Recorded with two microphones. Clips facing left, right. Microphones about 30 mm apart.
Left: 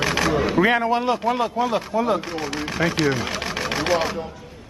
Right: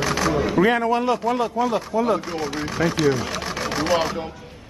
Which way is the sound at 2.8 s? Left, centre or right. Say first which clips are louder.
Even; left.